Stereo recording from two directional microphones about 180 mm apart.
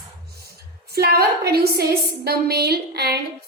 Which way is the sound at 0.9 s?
60° right (ahead or behind).